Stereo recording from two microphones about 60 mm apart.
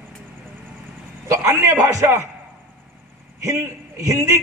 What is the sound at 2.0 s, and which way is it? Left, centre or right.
Speech, right.